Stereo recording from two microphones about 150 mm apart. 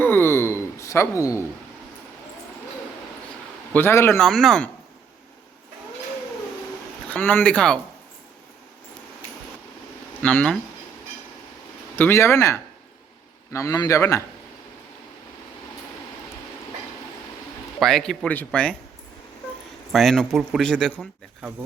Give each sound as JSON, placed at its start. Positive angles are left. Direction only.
{"t": 0.0, "sound": "a sound", "side_deg": 15}
{"t": 3.7, "sound": "speech", "side_deg": 15}
{"t": 4.2, "sound": "speech", "side_deg": 5}
{"t": 7.1, "sound": "speech", "side_deg": 10}
{"t": 10.2, "sound": "speech", "side_deg": 10}
{"t": 11.9, "sound": "a man's voice", "side_deg": 15}
{"t": 17.7, "sound": "speech", "side_deg": 0}
{"t": 19.9, "sound": "speech", "side_deg": 0}